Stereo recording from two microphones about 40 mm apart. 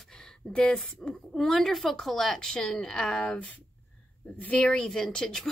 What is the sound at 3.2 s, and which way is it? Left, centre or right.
Speech, left.